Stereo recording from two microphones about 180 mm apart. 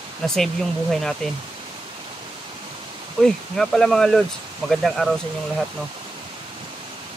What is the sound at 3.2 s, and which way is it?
Speech, 5° left (ahead or behind).